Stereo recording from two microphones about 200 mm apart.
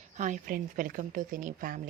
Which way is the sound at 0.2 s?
40° right (ahead or behind).